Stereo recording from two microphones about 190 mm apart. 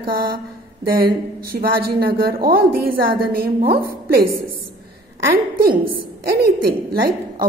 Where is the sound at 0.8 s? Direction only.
50° right (ahead or behind).